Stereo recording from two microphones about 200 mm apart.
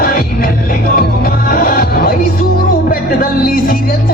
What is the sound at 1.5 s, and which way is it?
Music, 50° left (ahead or behind).